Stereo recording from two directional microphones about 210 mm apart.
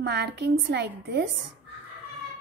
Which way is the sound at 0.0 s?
50° right (ahead or behind).